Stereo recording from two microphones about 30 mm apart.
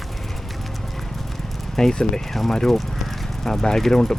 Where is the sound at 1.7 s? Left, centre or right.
Centre.